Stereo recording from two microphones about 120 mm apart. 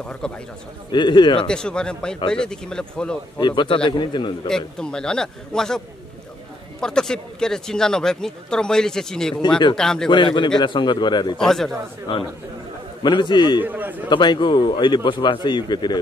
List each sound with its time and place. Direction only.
0.2 s speech: 5° left (ahead or behind)
0.9 s speech: 40° left (ahead or behind)
1.5 s speech: 5° left (ahead or behind)
3.3 s speech: 40° left (ahead or behind)
4.5 s speech: 5° left (ahead or behind)
6.8 s speech: 5° left (ahead or behind)
10.0 s speech: 40° left (ahead or behind)
11.3 s speech: 5° left (ahead or behind)
12.1 s speech: 40° left (ahead or behind)
13.6 s a man's voice: 15° right (ahead or behind)
14.0 s speech: 40° left (ahead or behind)